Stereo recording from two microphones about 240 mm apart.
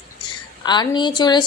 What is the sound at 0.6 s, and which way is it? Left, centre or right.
Speech, centre.